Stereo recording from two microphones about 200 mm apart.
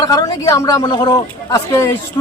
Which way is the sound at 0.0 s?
20° left (ahead or behind).